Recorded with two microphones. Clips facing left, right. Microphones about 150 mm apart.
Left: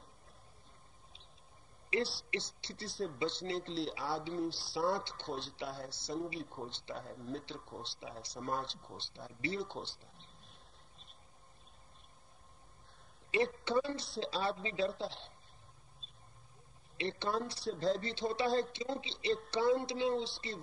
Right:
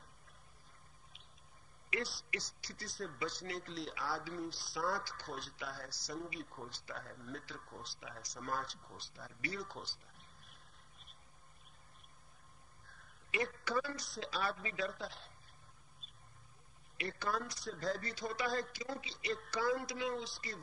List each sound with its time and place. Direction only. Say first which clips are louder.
1.9 s a man's voice: left 6 dB; 30° left (ahead or behind)
9.7 s a sound: left 5 dB; 30° left (ahead or behind)
13.3 s a man's voice: left 5 dB; 30° left (ahead or behind)
16.9 s a man's voice: left 4 dB; 25° left (ahead or behind)